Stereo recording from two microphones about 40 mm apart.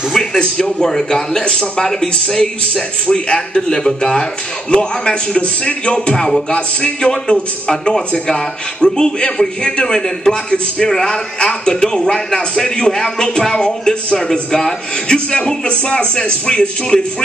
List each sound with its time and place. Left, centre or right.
0.1 s a man's voice: centre; by 17.0 s left